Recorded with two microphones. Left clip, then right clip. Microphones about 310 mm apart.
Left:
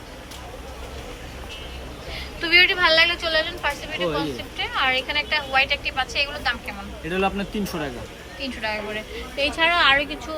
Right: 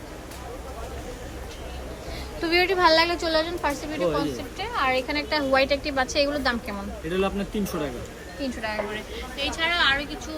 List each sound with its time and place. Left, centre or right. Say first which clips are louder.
2.4 s a woman's voice: left 4 dB; centre
7.1 s a woman's voice: left 3 dB; centre
8.4 s a woman's voice: left 1 dB; centre
9.4 s a woman's voice: left 5 dB; centre